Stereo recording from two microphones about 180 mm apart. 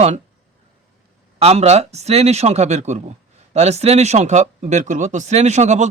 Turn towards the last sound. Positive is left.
turn(degrees=-40)  # may be behind; listen again after turning